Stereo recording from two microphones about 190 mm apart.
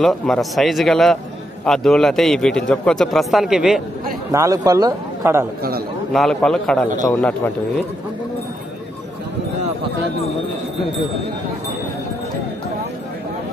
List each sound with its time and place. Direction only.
0.0 s a man's voice: centre (ahead or behind)
4.3 s a man's voice: 15° right (ahead or behind)
6.1 s a man's voice: 5° left (ahead or behind)